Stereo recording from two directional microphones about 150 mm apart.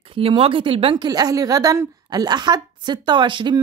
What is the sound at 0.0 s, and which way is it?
A woman's voice, 40° right (ahead or behind).